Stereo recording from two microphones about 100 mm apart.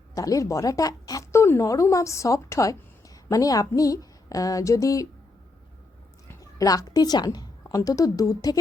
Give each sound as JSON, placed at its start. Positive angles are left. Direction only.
{"t": 0.1, "sound": "speech", "side_deg": 35}
{"t": 6.6, "sound": "speech", "side_deg": 35}